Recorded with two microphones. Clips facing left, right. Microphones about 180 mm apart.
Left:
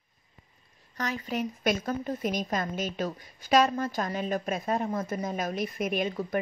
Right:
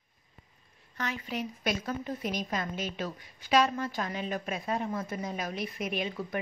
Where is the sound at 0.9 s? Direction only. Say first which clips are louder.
Left 3 dB; 40° left (ahead or behind).